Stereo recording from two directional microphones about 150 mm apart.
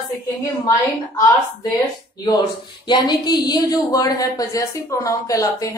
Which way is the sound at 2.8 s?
30° left (ahead or behind).